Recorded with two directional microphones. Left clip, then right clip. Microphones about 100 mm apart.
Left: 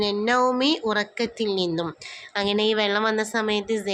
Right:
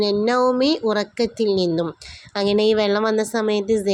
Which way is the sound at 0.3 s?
45° right (ahead or behind).